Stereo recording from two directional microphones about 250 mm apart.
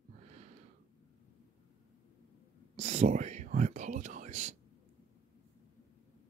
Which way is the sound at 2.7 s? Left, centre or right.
Right.